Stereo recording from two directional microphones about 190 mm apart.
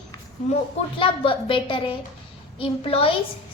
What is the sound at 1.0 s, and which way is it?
A woman's voice, 25° left (ahead or behind).